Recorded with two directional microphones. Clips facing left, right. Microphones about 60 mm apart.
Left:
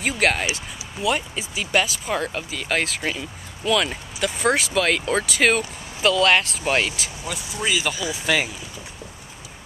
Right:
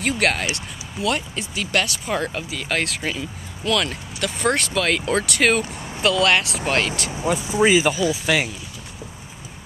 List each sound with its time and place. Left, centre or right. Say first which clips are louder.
0.0 s speech: even; centre
7.1 s speech: right 9 dB; right
8.3 s speech: left 1 dB; centre